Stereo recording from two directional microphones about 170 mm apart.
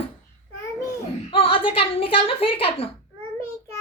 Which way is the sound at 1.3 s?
30° left (ahead or behind).